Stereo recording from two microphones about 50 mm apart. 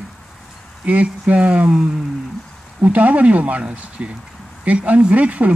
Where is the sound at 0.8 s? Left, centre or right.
Right.